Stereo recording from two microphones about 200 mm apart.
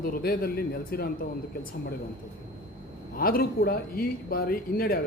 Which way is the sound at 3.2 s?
45° left (ahead or behind).